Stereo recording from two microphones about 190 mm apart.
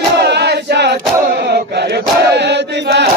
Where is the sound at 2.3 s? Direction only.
60° right (ahead or behind).